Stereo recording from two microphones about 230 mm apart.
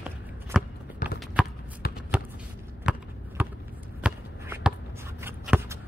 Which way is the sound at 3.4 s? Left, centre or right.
Centre.